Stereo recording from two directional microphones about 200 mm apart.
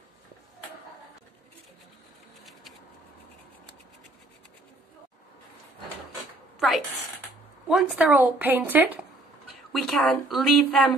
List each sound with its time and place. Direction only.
7.6 s speech: 5° right (ahead or behind)
9.7 s speech: centre (ahead or behind)